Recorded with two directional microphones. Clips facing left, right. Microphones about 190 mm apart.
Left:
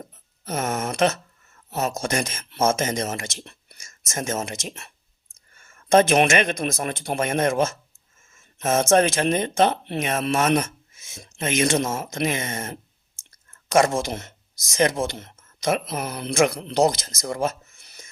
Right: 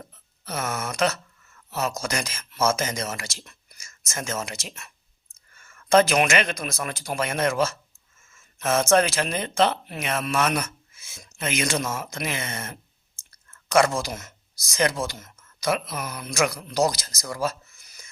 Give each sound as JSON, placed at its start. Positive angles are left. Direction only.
{"t": 0.6, "sound": "speech", "side_deg": 30}
{"t": 13.7, "sound": "speech", "side_deg": 25}
{"t": 17.2, "sound": "a sound", "side_deg": 25}